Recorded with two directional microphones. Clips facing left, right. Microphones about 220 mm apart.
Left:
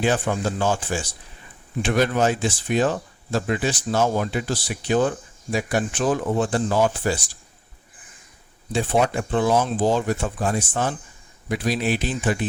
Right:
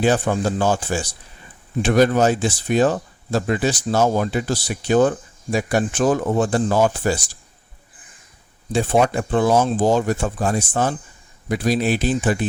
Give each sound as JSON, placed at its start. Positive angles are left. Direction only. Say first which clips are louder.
{"t": 0.0, "sound": "speech", "louder": "right 4 dB", "side_deg": -40}
{"t": 8.7, "sound": "speech", "louder": "right 3 dB", "side_deg": -40}